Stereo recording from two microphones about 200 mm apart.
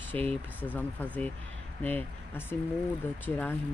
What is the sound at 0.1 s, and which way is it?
Speech, 10° left (ahead or behind).